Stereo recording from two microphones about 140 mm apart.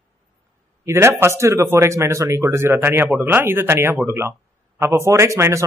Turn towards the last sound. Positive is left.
turn(degrees=-20)  # may be behind; listen again after turning